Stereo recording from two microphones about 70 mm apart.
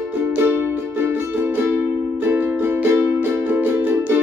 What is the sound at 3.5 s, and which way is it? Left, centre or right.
Music, right.